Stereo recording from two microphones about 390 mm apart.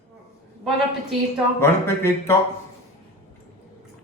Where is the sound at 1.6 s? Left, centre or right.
Centre.